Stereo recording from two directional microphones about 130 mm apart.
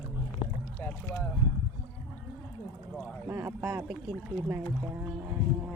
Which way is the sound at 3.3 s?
15° right (ahead or behind).